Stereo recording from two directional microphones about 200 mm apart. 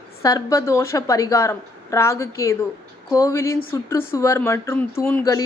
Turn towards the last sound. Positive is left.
turn(degrees=15)  # may be behind; listen again after turning